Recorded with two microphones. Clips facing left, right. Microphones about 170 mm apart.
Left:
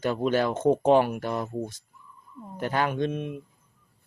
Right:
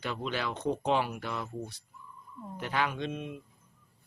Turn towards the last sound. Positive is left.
turn(degrees=55)  # may be behind; listen again after turning